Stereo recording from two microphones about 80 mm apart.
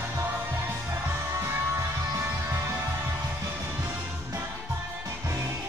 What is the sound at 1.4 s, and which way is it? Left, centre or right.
Music, right.